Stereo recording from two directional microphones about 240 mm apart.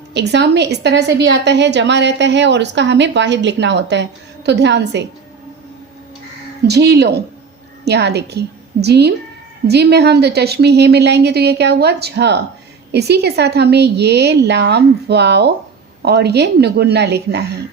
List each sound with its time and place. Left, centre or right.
0.1 s a woman's voice: right
6.7 s a woman's voice: right